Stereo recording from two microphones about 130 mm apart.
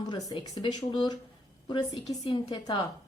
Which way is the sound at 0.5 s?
30° left (ahead or behind).